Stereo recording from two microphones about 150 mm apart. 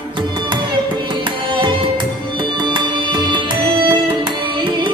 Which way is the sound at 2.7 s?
30° right (ahead or behind).